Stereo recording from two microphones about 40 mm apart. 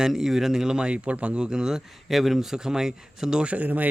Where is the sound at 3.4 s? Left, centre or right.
Right.